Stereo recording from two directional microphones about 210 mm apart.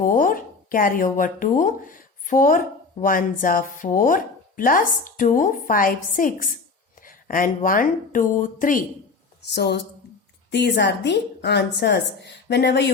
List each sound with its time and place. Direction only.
0.0 s speech: 40° left (ahead or behind)
9.5 s a woman's voice: 50° left (ahead or behind)